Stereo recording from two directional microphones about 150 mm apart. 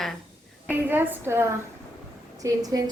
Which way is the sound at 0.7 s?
15° right (ahead or behind).